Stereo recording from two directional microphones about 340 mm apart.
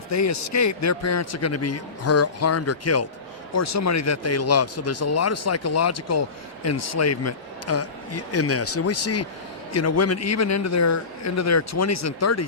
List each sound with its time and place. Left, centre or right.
0.1 s a man's voice: left